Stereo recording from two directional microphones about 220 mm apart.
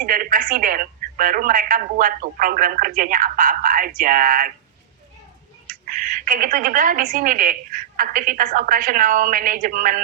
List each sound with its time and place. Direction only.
0.0 s speech: 40° right (ahead or behind)
5.6 s speech: 40° right (ahead or behind)